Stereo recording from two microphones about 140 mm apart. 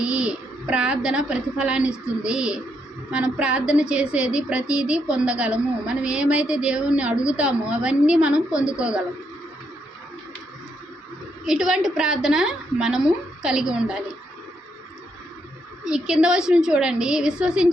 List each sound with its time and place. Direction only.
0.0 s a woman's voice: 5° right (ahead or behind)
11.4 s a woman's voice: 5° right (ahead or behind)
15.8 s a woman's voice: 5° right (ahead or behind)